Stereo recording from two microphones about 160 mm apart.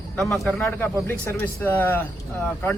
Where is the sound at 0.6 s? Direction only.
15° left (ahead or behind).